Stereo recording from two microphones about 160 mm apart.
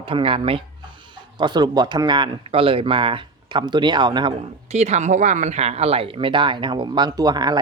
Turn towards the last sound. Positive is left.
turn(degrees=-25)  # may be behind; listen again after turning